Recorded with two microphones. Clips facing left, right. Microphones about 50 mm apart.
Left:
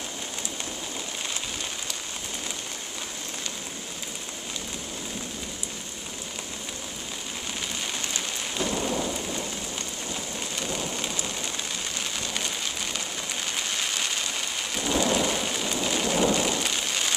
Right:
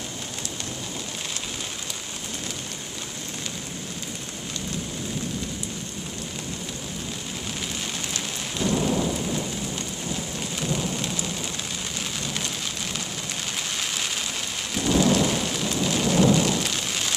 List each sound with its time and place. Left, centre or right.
8.1 s rain: centre
10.6 s rain: centre
14.7 s thunder: centre